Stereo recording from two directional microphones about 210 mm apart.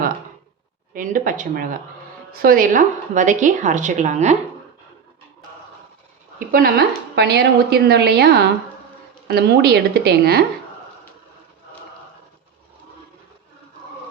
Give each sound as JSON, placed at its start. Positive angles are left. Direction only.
{"t": 0.9, "sound": "a woman's voice", "side_deg": -40}
{"t": 6.5, "sound": "a woman's voice", "side_deg": -45}